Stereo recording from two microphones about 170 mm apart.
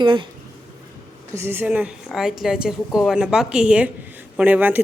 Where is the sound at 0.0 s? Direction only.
30° right (ahead or behind).